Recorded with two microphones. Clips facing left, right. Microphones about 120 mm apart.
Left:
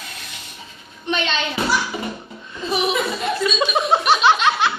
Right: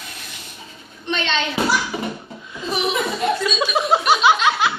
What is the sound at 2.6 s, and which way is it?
Laughter, centre (ahead or behind).